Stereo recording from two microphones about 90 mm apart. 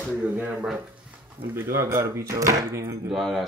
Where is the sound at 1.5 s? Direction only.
30° right (ahead or behind).